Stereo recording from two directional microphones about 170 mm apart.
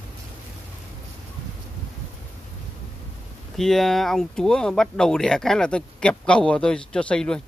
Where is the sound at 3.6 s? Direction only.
Centre (ahead or behind).